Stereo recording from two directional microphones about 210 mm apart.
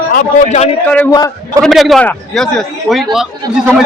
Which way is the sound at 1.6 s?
Centre (ahead or behind).